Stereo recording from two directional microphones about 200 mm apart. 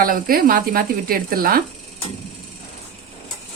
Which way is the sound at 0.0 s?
45° right (ahead or behind).